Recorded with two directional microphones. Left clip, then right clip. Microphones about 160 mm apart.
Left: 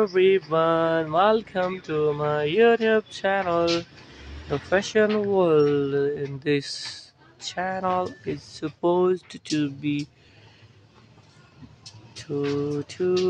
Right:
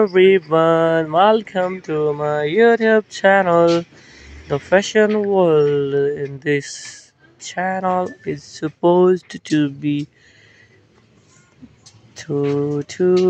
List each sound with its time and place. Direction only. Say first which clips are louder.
0.0 s speech: right 7 dB; 25° right (ahead or behind)
5.1 s speech: right 5 dB; 15° right (ahead or behind)
12.7 s speech: right 8 dB; 25° right (ahead or behind)